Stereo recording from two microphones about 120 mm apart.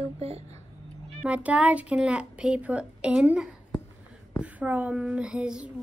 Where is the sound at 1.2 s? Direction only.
10° right (ahead or behind).